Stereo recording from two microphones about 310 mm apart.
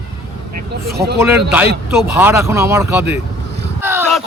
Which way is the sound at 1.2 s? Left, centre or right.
Centre.